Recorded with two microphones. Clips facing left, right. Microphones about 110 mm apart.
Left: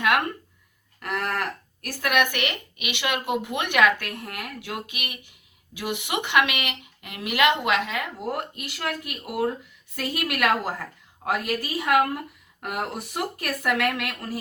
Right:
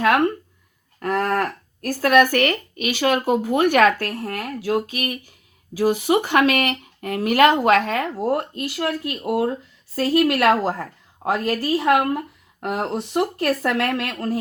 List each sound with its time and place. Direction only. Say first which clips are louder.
0.0 s speech: right 6 dB; 30° right (ahead or behind)